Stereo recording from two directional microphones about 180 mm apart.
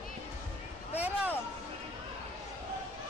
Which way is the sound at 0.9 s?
10° right (ahead or behind).